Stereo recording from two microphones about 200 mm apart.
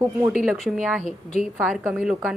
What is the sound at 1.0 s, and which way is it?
Speech, 35° left (ahead or behind).